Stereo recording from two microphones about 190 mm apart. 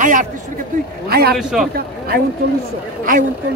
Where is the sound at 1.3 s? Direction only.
5° right (ahead or behind).